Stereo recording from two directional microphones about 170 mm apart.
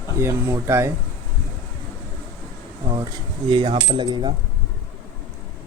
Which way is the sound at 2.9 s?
25° right (ahead or behind).